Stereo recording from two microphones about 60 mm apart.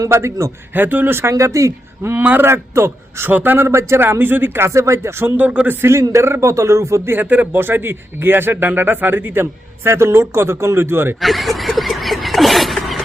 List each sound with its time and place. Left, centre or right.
0.0 s speech: right
0.7 s a man's voice: right
1.4 s speech: right
2.2 s a man's voice: right
2.5 s a man's voice: right
3.2 s a man's voice: right
3.8 s speech: right
4.0 s speech: right
5.4 s speech: right
5.8 s speech: right
7.1 s a man's voice: right
11.2 s a sound: centre